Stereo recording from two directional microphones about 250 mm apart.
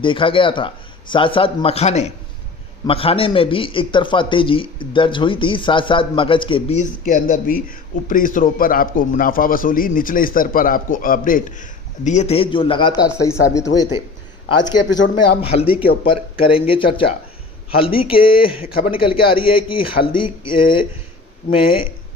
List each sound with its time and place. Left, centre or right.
0.0 s a man's voice: centre
15.4 s a man's voice: left